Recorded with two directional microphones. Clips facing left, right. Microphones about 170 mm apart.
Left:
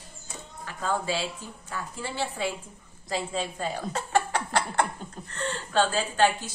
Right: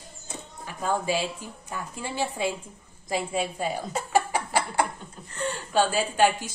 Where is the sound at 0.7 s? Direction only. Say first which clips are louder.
Right 2 dB; 15° right (ahead or behind).